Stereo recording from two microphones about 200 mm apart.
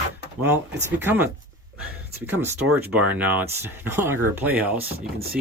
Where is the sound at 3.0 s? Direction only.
5° right (ahead or behind).